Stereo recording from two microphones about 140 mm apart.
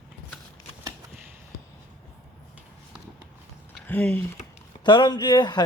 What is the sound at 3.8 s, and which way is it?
Speech, 10° left (ahead or behind).